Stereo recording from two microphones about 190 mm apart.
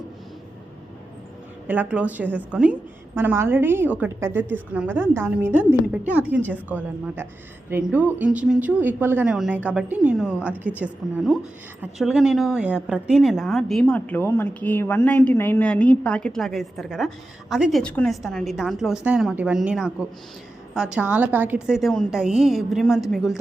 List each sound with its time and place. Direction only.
1.6 s a woman's voice: 10° right (ahead or behind)